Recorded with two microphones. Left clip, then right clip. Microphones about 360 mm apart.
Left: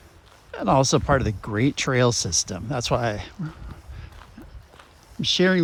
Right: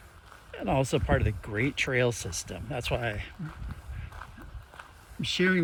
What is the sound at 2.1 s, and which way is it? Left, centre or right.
Speech, centre.